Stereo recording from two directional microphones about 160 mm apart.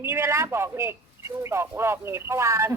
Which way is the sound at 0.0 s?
15° right (ahead or behind).